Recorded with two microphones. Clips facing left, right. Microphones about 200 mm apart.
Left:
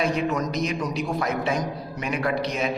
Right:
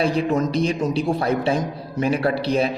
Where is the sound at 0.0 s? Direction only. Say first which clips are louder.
Right 4 dB; 30° right (ahead or behind).